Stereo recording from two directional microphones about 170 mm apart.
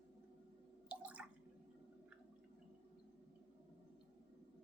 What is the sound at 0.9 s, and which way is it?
Drip, 10° right (ahead or behind).